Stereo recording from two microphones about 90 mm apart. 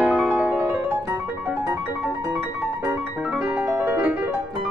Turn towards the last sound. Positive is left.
turn(degrees=-20)  # may be behind; listen again after turning